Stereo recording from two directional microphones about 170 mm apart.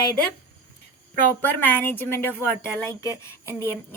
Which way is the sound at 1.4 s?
10° left (ahead or behind).